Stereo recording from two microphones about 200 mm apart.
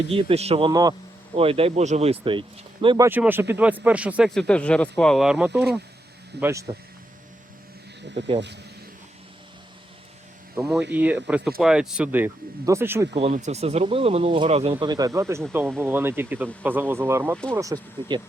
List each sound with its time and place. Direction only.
0.1 s speech: 30° right (ahead or behind)
1.4 s speech: 30° right (ahead or behind)
3.1 s speech: 10° right (ahead or behind)
6.4 s speech: 15° right (ahead or behind)
8.1 s speech: 60° right (ahead or behind)
10.5 s speech: 5° right (ahead or behind)
13.1 s speech: 35° right (ahead or behind); by 18.2 s 15° right (ahead or behind)